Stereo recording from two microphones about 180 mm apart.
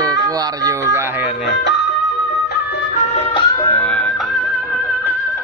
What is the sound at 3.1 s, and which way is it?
Music, 35° left (ahead or behind).